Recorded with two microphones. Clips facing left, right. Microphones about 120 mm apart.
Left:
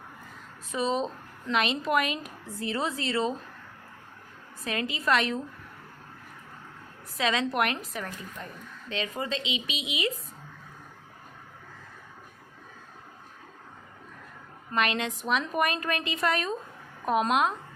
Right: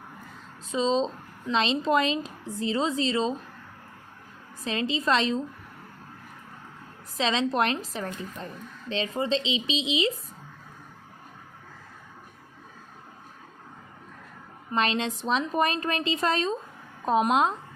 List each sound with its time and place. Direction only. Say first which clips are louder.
0.7 s a woman's voice: right 3 dB; 20° right (ahead or behind)
4.6 s a woman's voice: right 3 dB; 25° right (ahead or behind)
7.2 s a woman's voice: right 2 dB; 25° right (ahead or behind)
14.8 s a woman's voice: right 2 dB; 30° right (ahead or behind)